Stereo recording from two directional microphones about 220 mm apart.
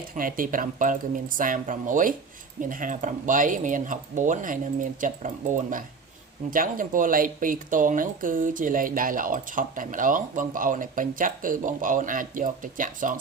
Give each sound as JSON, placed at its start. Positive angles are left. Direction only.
{"t": 0.1, "sound": "speech", "side_deg": -40}